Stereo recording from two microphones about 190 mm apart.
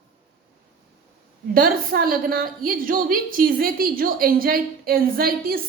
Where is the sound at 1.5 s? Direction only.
50° right (ahead or behind).